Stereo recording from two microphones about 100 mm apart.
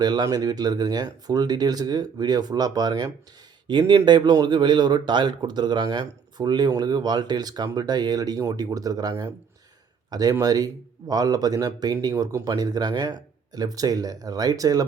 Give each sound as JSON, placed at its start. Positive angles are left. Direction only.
{"t": 0.0, "sound": "speech", "side_deg": -45}
{"t": 3.7, "sound": "speech", "side_deg": -50}